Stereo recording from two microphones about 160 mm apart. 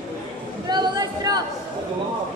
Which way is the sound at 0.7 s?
25° right (ahead or behind).